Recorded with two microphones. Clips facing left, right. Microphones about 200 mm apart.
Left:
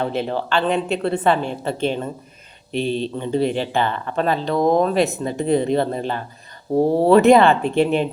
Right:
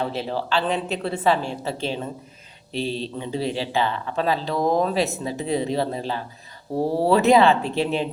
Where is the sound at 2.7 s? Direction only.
55° left (ahead or behind).